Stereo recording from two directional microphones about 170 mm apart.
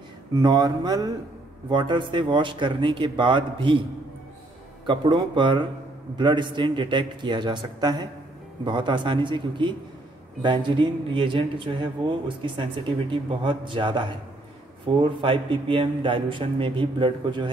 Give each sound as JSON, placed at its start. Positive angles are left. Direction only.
{"t": 0.3, "sound": "a man's voice", "side_deg": -25}
{"t": 4.8, "sound": "a man's voice", "side_deg": -30}